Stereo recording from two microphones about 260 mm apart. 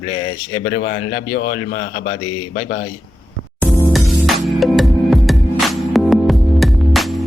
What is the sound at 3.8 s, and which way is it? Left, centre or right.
Music, centre.